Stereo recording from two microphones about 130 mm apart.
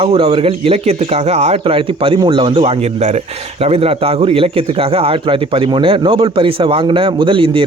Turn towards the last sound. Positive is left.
turn(degrees=-40)  # may be behind; listen again after turning